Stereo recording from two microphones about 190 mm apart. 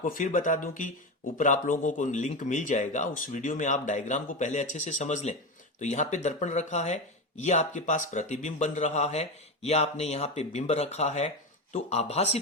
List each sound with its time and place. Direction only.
0.0 s speech: 45° left (ahead or behind)